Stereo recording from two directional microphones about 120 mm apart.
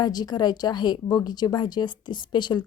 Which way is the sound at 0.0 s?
35° left (ahead or behind).